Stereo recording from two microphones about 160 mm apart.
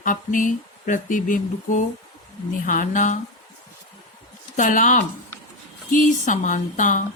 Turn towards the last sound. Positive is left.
turn(degrees=55)  # may be behind; listen again after turning